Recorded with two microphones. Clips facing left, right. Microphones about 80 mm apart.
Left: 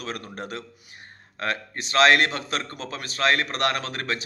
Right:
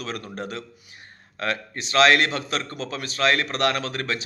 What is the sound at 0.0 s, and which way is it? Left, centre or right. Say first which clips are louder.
A man's voice: right 2 dB; left.